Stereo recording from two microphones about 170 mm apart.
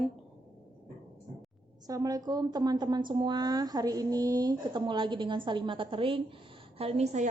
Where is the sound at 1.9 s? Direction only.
20° right (ahead or behind).